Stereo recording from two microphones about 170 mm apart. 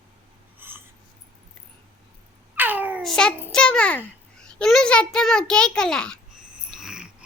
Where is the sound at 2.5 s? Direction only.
10° right (ahead or behind).